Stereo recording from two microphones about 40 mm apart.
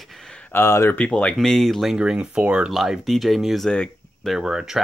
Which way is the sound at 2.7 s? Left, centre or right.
Centre.